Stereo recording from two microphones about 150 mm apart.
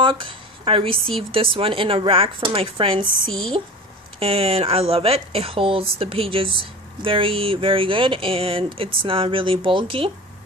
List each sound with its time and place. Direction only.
0.0 s speech: 35° right (ahead or behind)